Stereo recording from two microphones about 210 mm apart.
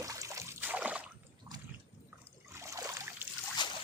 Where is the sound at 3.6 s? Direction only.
20° left (ahead or behind).